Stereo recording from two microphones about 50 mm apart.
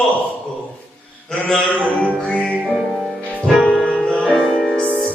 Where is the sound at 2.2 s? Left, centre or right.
Centre.